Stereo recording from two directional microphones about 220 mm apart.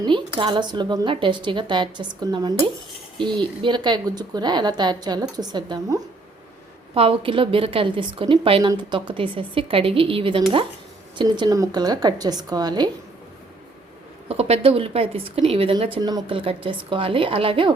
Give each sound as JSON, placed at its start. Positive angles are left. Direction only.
{"t": 0.0, "sound": "a woman's voice", "side_deg": -20}
{"t": 14.3, "sound": "a woman's voice", "side_deg": -25}